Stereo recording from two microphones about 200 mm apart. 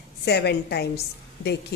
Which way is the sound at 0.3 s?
55° left (ahead or behind).